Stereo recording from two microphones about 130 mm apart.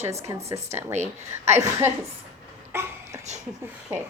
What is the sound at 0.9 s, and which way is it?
Speech, 60° right (ahead or behind).